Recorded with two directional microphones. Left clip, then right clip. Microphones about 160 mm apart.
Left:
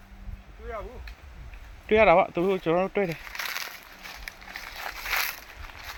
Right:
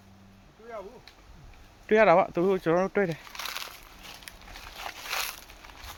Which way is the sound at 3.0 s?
Centre (ahead or behind).